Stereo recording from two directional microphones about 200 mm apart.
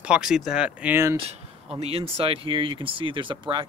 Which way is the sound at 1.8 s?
30° right (ahead or behind).